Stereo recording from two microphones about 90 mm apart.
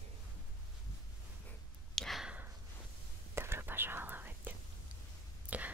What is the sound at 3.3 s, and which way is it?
Whispering, 25° right (ahead or behind).